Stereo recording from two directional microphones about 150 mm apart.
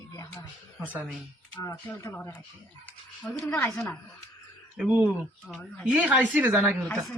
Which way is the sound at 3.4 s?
20° left (ahead or behind).